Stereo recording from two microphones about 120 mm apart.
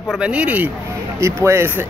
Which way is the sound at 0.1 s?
10° right (ahead or behind).